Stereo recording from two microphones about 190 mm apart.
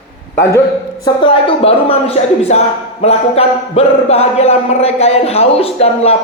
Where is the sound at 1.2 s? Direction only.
30° left (ahead or behind).